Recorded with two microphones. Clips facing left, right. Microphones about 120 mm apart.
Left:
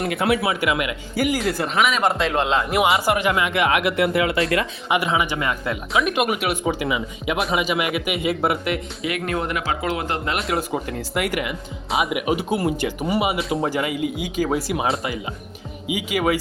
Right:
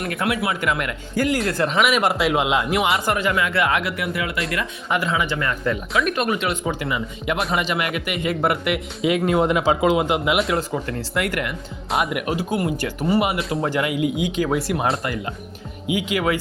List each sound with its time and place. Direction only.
0.1 s speech: 25° left (ahead or behind)
0.6 s speech: 10° left (ahead or behind); by 2.7 s 10° right (ahead or behind)
2.7 s speech: 5° left (ahead or behind)
3.2 s speech: 15° left (ahead or behind)
4.9 s speech: 15° left (ahead or behind)
5.9 s speech: centre (ahead or behind)
9.0 s speech: 25° right (ahead or behind)
10.3 s speech: centre (ahead or behind)
12.3 s speech: 25° left (ahead or behind)
13.0 s speech: 15° left (ahead or behind)
13.2 s speech: centre (ahead or behind)